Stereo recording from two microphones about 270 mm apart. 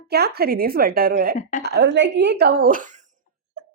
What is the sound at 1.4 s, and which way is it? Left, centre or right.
Speech, left.